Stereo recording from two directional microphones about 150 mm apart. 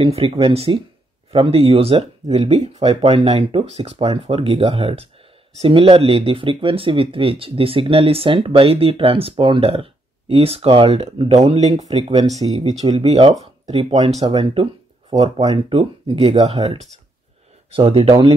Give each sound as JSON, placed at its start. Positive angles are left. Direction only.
{"t": 0.0, "sound": "speech", "side_deg": -40}
{"t": 12.2, "sound": "speech", "side_deg": -25}
{"t": 12.4, "sound": "speech", "side_deg": -45}